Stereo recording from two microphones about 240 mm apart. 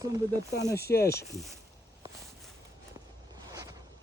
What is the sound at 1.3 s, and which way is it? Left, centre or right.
Speech, centre.